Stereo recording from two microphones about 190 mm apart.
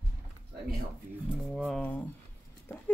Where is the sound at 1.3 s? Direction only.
5° right (ahead or behind).